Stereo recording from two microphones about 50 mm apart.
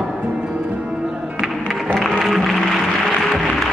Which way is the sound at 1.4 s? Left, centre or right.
Centre.